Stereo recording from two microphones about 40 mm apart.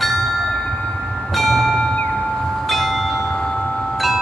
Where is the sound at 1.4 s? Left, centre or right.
Centre.